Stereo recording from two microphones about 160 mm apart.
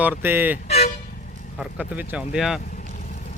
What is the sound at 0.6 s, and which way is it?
Toot, 40° left (ahead or behind).